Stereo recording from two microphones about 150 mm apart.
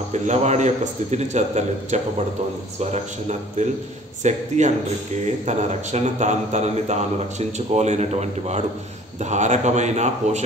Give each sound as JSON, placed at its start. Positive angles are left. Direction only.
{"t": 0.1, "sound": "speech", "side_deg": -50}